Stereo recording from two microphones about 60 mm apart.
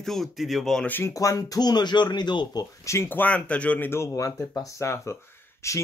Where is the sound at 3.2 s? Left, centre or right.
Left.